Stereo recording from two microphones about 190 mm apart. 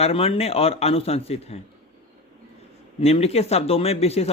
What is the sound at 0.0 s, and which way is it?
Speech, 30° left (ahead or behind).